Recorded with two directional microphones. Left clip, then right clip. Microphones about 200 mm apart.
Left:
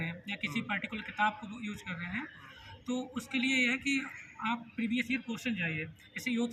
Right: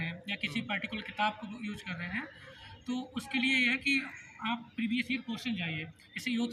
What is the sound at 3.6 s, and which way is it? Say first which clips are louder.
A man's voice: right 2 dB; 5° right (ahead or behind).